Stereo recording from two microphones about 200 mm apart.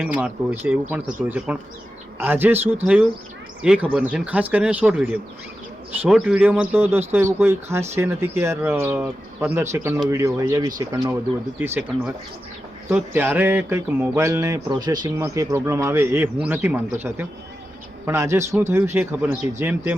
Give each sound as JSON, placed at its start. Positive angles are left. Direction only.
{"t": 0.0, "sound": "speech", "side_deg": -5}